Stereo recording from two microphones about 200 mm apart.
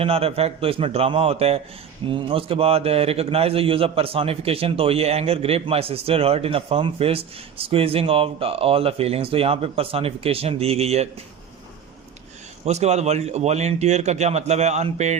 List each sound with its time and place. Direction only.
0.0 s a man's voice: 30° right (ahead or behind)
12.6 s a man's voice: 35° right (ahead or behind)